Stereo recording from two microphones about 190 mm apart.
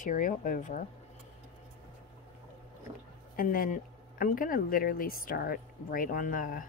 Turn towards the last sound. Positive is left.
turn(degrees=45)  # may be behind; listen again after turning